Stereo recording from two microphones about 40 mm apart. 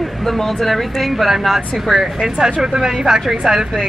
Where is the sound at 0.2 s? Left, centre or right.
Centre.